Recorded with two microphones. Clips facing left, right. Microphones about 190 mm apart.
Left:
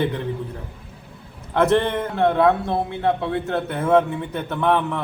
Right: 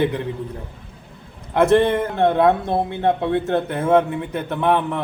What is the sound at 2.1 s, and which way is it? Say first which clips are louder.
Speech: even; 20° right (ahead or behind).